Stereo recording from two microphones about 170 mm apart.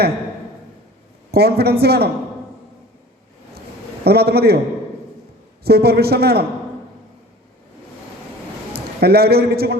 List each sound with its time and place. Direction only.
1.3 s a woman's voice: 65° right (ahead or behind)
4.0 s a woman's voice: 70° right (ahead or behind)
5.6 s a woman's voice: 70° right (ahead or behind)
8.7 s a man's voice: 70° right (ahead or behind)